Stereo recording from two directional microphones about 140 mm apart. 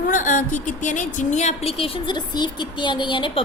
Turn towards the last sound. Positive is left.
turn(degrees=35)  # may be behind; listen again after turning